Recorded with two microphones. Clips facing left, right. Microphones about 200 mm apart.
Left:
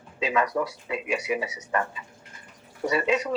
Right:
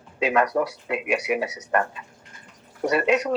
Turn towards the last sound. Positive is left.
turn(degrees=-70)  # may be behind; listen again after turning